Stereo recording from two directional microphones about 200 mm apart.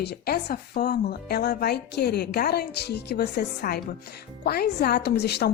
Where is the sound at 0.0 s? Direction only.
55° left (ahead or behind).